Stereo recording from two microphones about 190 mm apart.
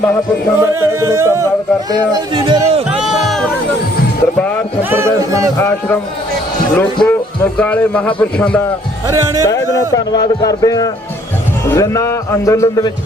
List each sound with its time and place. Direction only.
0.6 s music: 15° right (ahead or behind)
1.9 s speech: 25° right (ahead or behind)
3.0 s music: centre (ahead or behind)
4.8 s music: 10° right (ahead or behind)
6.7 s a man's voice: 5° left (ahead or behind)
9.0 s music: 15° right (ahead or behind)
9.4 s a man's voice: 15° left (ahead or behind)